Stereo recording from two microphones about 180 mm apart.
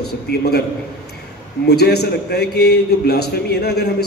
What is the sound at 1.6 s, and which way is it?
A man's voice, 65° left (ahead or behind).